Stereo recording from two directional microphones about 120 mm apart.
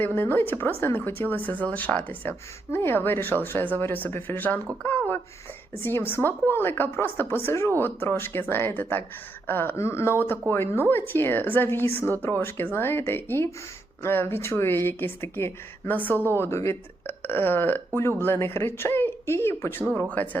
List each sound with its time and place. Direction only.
0.0 s speech: 20° left (ahead or behind)